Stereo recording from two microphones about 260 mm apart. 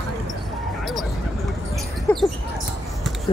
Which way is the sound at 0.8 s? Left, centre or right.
Centre.